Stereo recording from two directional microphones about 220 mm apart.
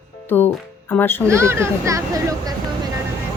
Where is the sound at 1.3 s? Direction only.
10° right (ahead or behind).